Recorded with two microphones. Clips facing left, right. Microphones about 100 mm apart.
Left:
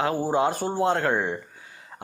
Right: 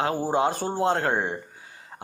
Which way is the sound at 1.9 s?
20° right (ahead or behind).